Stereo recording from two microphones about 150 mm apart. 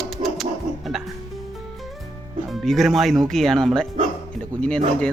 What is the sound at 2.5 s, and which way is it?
Speech, centre (ahead or behind).